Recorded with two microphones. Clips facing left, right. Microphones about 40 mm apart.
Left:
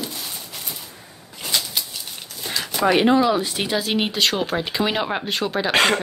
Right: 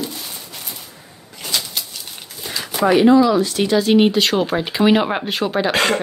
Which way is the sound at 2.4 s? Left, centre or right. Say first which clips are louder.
Even; centre.